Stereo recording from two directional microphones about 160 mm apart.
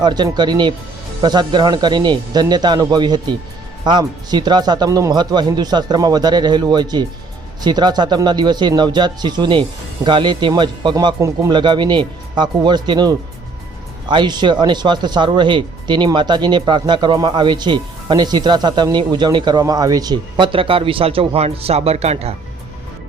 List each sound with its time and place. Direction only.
0.0 s speech: 25° right (ahead or behind)